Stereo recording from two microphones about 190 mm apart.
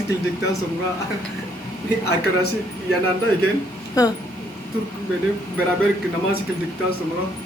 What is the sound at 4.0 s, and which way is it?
Speech, 20° left (ahead or behind).